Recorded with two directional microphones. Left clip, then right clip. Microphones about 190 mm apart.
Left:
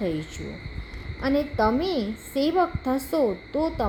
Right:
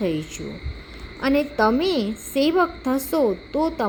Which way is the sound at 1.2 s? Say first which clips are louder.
Right 3 dB; 15° right (ahead or behind).